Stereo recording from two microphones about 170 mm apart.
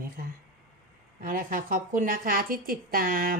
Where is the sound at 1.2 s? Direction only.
55° right (ahead or behind).